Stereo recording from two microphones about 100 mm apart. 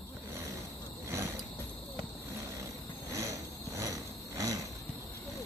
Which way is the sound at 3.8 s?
35° right (ahead or behind).